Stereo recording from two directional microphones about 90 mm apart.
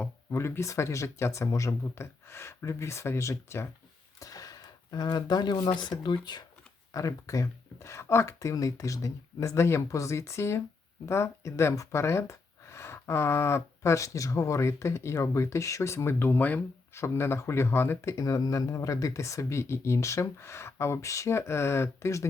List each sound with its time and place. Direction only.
0.0 s speech: 30° left (ahead or behind)
4.2 s speech: 45° left (ahead or behind)
6.9 s speech: 40° left (ahead or behind)